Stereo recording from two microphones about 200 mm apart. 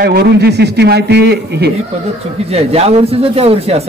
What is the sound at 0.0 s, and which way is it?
A man's voice, 55° right (ahead or behind).